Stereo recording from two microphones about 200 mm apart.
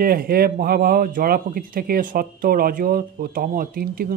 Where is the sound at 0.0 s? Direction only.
50° right (ahead or behind).